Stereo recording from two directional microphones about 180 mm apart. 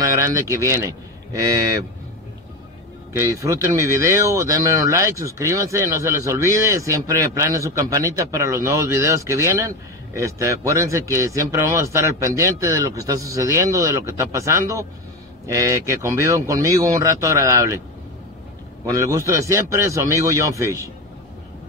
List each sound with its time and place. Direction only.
0.0 s speech: 15° right (ahead or behind)
3.2 s speech: 15° right (ahead or behind)
18.9 s speech: 15° right (ahead or behind)